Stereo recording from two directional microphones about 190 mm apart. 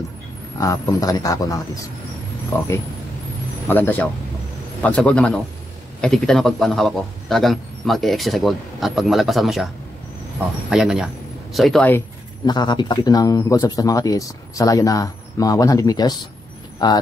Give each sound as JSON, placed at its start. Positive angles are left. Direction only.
{"t": 0.6, "sound": "speech", "side_deg": 15}
{"t": 3.6, "sound": "a man's voice", "side_deg": 10}
{"t": 10.7, "sound": "a man's voice", "side_deg": -5}
{"t": 12.4, "sound": "speech", "side_deg": 25}